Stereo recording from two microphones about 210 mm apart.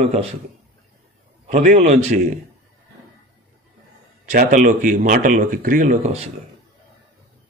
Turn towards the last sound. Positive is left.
turn(degrees=-30)  # may be behind; listen again after turning